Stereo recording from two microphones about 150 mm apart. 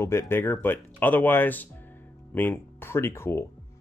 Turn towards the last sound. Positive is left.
turn(degrees=15)  # may be behind; listen again after turning